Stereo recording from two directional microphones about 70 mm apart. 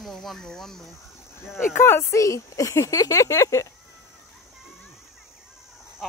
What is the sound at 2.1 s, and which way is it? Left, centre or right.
Speech, left.